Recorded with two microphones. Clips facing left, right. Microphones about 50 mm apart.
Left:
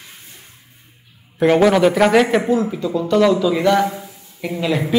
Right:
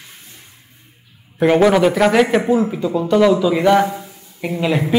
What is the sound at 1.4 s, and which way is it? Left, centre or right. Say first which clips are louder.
Speech: even; centre.